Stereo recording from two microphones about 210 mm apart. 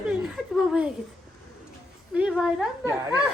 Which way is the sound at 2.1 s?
5° right (ahead or behind).